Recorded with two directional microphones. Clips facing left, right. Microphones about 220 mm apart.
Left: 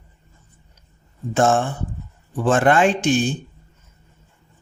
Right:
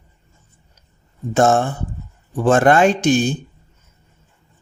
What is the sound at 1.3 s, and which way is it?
Speech, 40° right (ahead or behind).